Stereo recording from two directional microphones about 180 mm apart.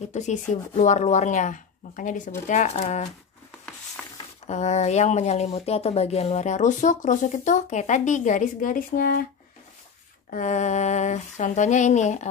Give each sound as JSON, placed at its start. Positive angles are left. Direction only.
{"t": 0.1, "sound": "speech", "side_deg": 40}
{"t": 4.0, "sound": "a sound", "side_deg": 0}
{"t": 4.5, "sound": "speech", "side_deg": 40}
{"t": 10.3, "sound": "speech", "side_deg": 40}